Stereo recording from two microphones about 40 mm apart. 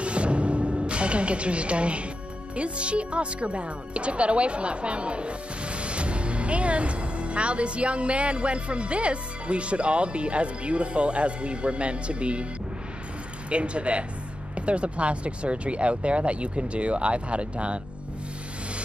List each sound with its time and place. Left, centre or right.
0.0 s music: right
2.5 s speech: right
13.5 s speech: right